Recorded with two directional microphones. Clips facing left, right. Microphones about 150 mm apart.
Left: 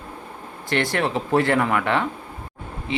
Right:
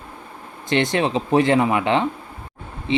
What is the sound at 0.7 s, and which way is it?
Speech, 20° right (ahead or behind).